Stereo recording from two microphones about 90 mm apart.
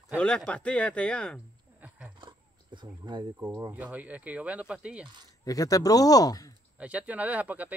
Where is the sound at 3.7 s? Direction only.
15° right (ahead or behind).